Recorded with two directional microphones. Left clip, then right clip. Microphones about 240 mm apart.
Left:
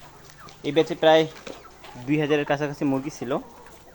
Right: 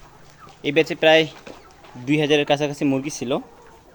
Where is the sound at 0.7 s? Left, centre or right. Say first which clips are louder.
Right 2 dB; right.